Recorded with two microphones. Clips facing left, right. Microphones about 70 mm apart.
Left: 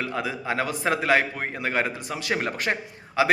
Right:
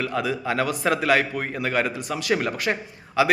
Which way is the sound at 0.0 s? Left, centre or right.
Left.